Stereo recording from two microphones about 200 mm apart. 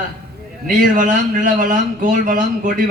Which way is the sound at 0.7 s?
40° right (ahead or behind).